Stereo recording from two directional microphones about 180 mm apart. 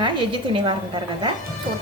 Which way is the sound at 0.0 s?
30° right (ahead or behind).